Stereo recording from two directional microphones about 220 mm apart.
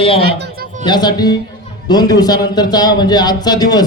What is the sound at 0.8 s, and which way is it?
A man's voice, 20° left (ahead or behind).